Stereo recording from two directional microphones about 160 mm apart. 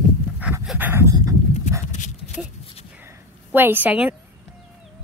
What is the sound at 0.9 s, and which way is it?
Speech, 20° right (ahead or behind).